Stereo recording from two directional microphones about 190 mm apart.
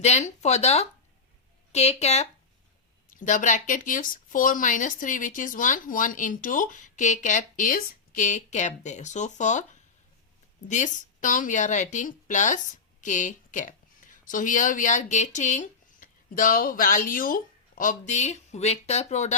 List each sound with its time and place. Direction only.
0.0 s a woman's voice: 35° left (ahead or behind)
10.7 s a woman's voice: 40° left (ahead or behind)